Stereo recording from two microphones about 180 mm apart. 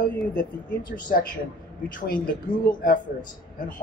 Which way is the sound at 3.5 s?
45° left (ahead or behind).